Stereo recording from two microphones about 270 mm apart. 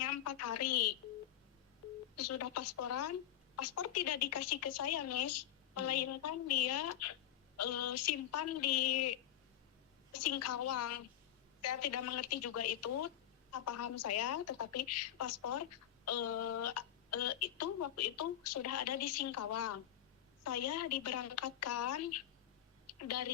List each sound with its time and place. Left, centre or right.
0.0 s a woman's voice: left
2.1 s a woman's voice: left